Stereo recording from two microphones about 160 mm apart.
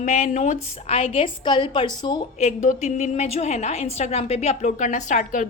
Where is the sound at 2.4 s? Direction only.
50° left (ahead or behind).